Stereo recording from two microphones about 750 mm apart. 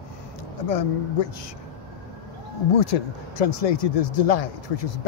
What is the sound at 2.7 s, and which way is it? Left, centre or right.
Speech, left.